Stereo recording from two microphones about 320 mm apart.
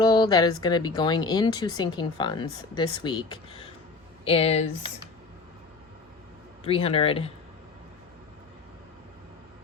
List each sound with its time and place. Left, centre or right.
0.0 s speech: centre
6.7 s speech: centre